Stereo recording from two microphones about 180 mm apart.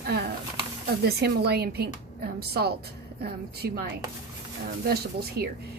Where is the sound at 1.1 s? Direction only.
65° right (ahead or behind).